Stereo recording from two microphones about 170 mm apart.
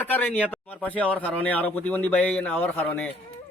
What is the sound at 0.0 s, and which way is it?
Speech, 10° left (ahead or behind).